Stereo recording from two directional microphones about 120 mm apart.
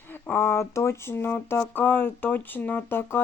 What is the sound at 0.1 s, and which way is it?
Speech, 20° left (ahead or behind).